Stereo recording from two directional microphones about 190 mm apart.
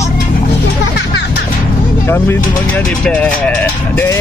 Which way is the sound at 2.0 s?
10° left (ahead or behind).